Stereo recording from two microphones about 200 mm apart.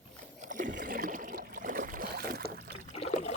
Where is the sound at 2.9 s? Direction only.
30° left (ahead or behind).